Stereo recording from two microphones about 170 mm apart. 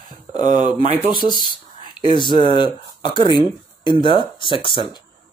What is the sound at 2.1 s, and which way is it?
Speech, 25° left (ahead or behind).